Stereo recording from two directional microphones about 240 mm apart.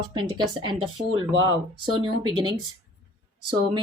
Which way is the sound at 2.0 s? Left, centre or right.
Centre.